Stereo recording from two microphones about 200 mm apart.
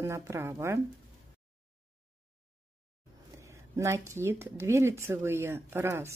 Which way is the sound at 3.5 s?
15° right (ahead or behind).